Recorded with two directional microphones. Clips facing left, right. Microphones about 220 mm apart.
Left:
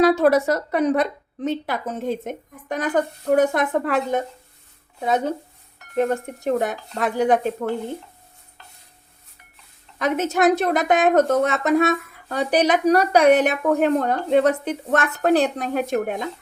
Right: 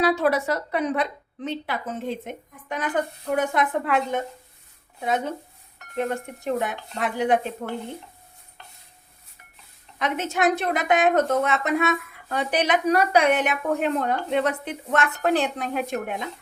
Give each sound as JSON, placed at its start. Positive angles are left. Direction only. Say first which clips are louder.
{"t": 0.0, "sound": "a woman's voice", "louder": "left 6 dB", "side_deg": 45}
{"t": 10.0, "sound": "a woman's voice", "louder": "left 5 dB", "side_deg": 40}